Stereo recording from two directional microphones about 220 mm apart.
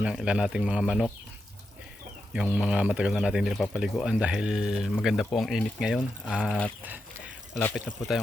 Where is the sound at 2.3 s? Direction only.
5° right (ahead or behind).